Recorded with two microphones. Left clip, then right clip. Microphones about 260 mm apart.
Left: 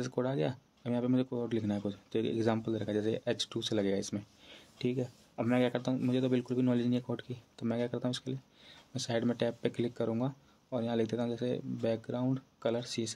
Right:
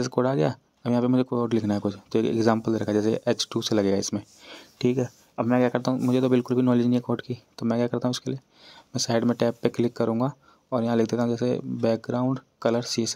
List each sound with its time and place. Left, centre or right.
0.0 s speech: right